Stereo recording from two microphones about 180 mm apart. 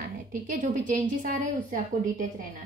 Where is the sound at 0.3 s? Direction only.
45° right (ahead or behind).